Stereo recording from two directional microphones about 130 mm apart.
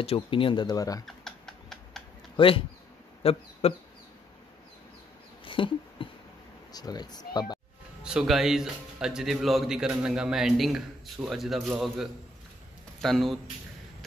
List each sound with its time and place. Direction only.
0.0 s speech: 45° left (ahead or behind); by 1.0 s 30° left (ahead or behind)
1.0 s typing: 5° left (ahead or behind)
2.3 s speech: 45° left (ahead or behind)
5.4 s a sound: 40° left (ahead or behind)
6.7 s speech: 30° left (ahead or behind)
8.0 s a man's voice: 5° right (ahead or behind)